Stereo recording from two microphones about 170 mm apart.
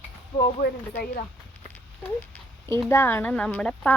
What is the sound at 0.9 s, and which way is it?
Speech, 65° left (ahead or behind).